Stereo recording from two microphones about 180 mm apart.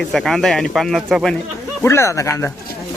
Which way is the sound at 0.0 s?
Centre (ahead or behind).